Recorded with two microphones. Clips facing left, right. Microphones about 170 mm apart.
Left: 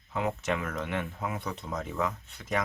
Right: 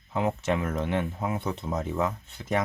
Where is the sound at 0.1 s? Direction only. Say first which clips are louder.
Right 4 dB; 25° right (ahead or behind).